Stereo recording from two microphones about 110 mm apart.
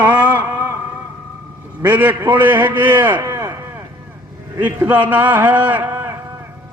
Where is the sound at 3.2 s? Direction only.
30° right (ahead or behind).